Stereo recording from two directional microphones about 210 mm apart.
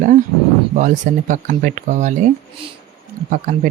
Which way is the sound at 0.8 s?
35° right (ahead or behind).